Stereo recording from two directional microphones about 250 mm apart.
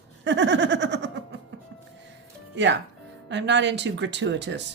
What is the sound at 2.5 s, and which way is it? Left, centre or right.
Speech, right.